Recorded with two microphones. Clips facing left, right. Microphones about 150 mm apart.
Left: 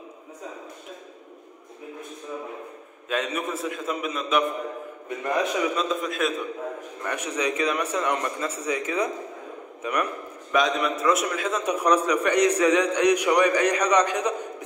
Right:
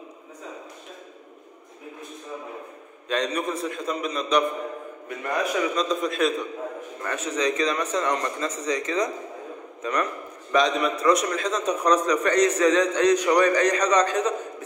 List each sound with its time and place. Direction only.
3.1 s a man's voice: 5° left (ahead or behind)
5.2 s a man's voice: 20° left (ahead or behind)
5.8 s a man's voice: centre (ahead or behind)
7.0 s a man's voice: 10° left (ahead or behind)